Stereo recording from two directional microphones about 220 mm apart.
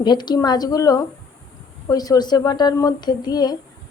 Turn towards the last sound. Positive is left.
turn(degrees=20)  # may be behind; listen again after turning